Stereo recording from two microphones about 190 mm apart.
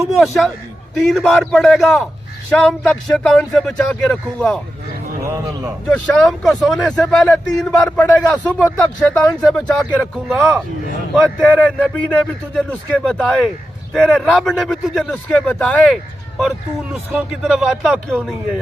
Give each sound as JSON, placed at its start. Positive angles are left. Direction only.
{"t": 0.2, "sound": "a man's voice", "side_deg": 0}
{"t": 5.2, "sound": "speech", "side_deg": -15}
{"t": 5.9, "sound": "a man's voice", "side_deg": 0}